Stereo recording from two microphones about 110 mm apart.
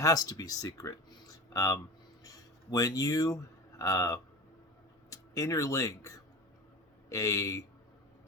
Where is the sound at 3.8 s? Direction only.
30° left (ahead or behind).